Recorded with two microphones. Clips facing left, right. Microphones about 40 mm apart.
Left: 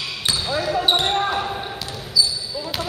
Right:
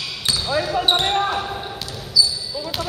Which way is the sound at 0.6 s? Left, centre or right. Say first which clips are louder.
Even; centre.